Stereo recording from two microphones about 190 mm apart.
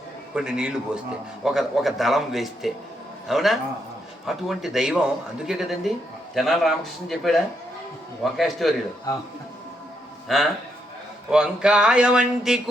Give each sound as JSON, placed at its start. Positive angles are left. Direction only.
{"t": 0.3, "sound": "a man's voice", "side_deg": -5}
{"t": 9.1, "sound": "speech", "side_deg": 20}
{"t": 10.2, "sound": "a man's voice", "side_deg": 0}